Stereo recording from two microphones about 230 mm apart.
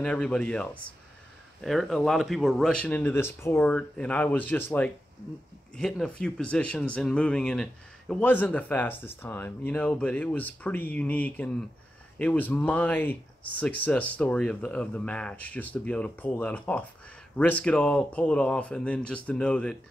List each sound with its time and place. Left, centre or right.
0.0 s speech: centre